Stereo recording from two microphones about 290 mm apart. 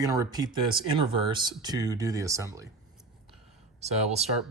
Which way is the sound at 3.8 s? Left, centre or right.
Right.